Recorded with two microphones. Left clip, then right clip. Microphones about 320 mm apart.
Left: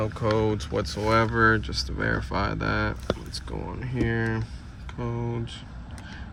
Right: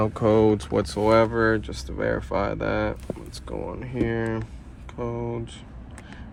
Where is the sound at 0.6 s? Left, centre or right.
Centre.